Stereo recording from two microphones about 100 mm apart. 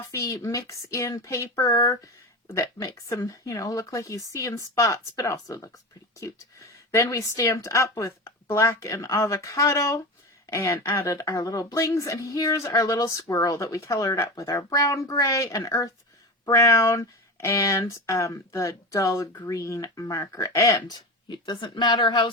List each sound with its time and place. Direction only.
0.1 s speech: 35° left (ahead or behind); by 22.3 s 50° left (ahead or behind)